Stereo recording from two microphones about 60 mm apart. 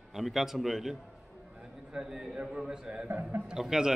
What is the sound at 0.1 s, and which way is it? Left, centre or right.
Speech, centre.